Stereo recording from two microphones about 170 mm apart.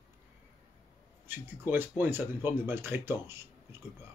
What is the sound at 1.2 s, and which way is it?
Speech, 10° right (ahead or behind).